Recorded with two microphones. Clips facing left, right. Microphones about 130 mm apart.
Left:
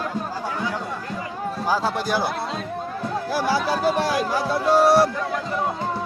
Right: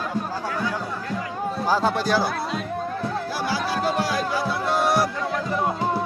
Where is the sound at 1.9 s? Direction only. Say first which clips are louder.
Right 2 dB; 15° left (ahead or behind).